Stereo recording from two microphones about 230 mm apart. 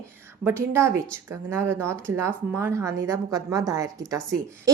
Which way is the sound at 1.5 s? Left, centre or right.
Centre.